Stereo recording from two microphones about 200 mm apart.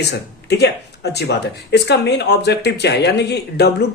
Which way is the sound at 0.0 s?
60° left (ahead or behind).